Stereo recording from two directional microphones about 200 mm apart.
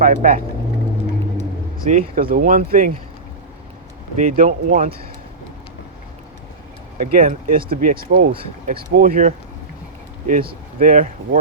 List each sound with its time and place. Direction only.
0.0 s speech: 45° right (ahead or behind)
1.8 s speech: 40° right (ahead or behind)
4.2 s speech: 40° right (ahead or behind)
7.0 s speech: 45° right (ahead or behind)